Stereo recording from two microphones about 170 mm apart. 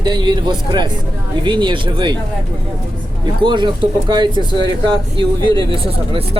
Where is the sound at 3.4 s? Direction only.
25° right (ahead or behind).